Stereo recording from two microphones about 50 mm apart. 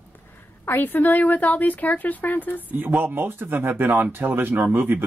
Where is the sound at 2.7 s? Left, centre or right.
Right.